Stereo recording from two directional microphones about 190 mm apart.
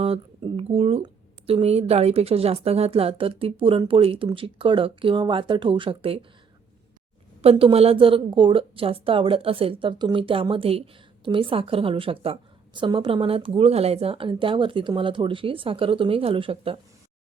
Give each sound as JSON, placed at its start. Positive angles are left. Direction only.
{"t": 0.0, "sound": "speech", "side_deg": -30}
{"t": 7.4, "sound": "speech", "side_deg": -30}